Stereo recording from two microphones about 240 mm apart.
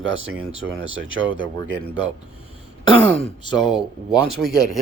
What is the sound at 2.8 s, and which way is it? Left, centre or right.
Speech, left.